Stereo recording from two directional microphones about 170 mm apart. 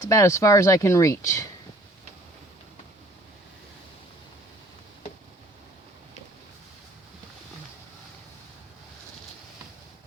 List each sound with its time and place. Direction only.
0.0 s speech: 20° left (ahead or behind)